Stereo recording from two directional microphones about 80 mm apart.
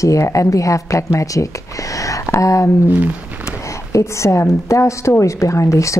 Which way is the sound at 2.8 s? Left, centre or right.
Right.